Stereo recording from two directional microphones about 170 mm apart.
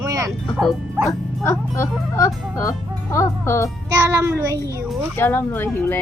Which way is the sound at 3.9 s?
15° right (ahead or behind).